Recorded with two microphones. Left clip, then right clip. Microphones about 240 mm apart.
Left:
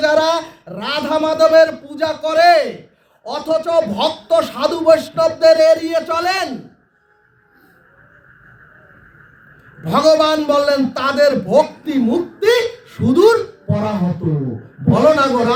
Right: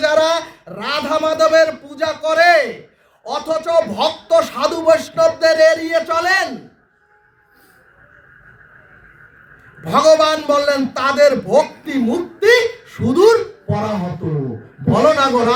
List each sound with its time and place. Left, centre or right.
0.0 s a man's voice: centre
9.8 s a man's voice: centre
14.8 s a man's voice: centre